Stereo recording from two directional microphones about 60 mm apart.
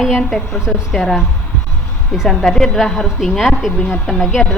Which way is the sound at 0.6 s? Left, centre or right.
Centre.